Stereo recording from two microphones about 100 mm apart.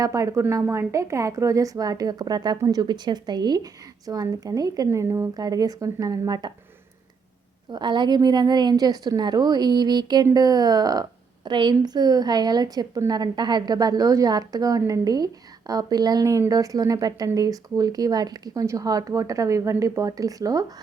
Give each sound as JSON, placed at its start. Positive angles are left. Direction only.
{"t": 0.0, "sound": "speech", "side_deg": -35}
{"t": 2.6, "sound": "speech", "side_deg": -30}
{"t": 2.8, "sound": "speech", "side_deg": -45}
{"t": 5.3, "sound": "speech", "side_deg": -40}
{"t": 7.7, "sound": "a woman's voice", "side_deg": -50}